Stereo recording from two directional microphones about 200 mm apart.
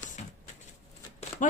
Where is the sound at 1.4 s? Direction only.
40° left (ahead or behind).